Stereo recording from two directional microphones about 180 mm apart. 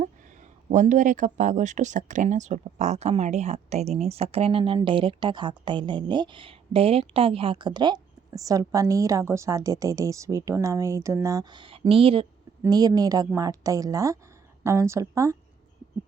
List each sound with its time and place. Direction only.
0.7 s a woman's voice: 45° right (ahead or behind); by 15.4 s 15° right (ahead or behind)